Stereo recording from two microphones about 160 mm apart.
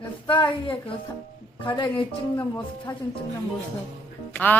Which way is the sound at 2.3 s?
15° left (ahead or behind).